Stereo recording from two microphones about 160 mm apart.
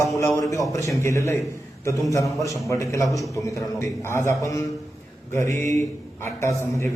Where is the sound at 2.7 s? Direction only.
20° left (ahead or behind).